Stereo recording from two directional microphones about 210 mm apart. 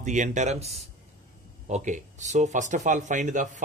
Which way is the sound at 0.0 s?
35° right (ahead or behind).